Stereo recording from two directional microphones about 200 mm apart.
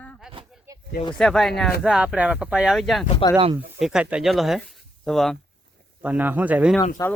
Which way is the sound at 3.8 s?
5° right (ahead or behind).